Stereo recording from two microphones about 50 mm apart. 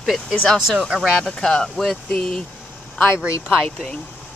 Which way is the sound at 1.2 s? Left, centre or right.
Centre.